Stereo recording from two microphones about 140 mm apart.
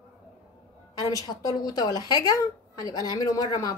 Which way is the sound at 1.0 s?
25° left (ahead or behind).